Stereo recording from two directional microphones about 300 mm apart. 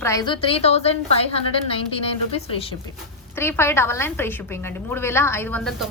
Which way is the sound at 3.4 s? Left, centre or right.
Centre.